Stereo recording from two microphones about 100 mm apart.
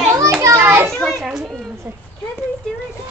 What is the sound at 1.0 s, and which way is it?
Speech, 5° right (ahead or behind).